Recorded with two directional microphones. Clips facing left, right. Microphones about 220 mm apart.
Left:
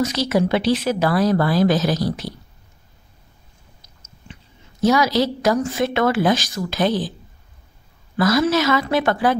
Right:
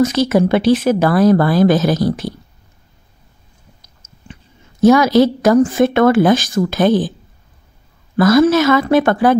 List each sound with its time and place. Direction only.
0.0 s speech: 50° right (ahead or behind)
4.8 s speech: 50° right (ahead or behind)
8.2 s speech: 50° right (ahead or behind)